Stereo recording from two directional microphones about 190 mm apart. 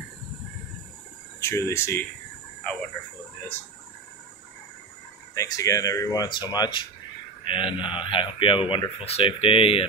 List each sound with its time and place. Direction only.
1.4 s speech: 15° left (ahead or behind)
5.3 s speech: 15° left (ahead or behind)